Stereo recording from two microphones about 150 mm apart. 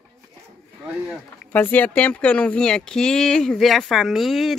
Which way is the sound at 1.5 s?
10° left (ahead or behind).